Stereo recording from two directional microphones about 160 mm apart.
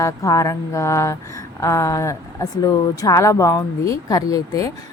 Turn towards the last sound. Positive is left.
turn(degrees=20)  # may be behind; listen again after turning